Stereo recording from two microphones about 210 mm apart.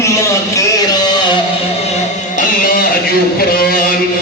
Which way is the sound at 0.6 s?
20° left (ahead or behind).